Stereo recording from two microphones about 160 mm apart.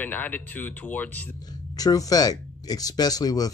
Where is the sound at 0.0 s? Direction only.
10° left (ahead or behind).